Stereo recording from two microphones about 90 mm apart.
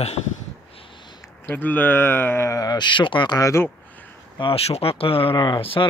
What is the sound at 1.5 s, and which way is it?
Speech, 20° left (ahead or behind).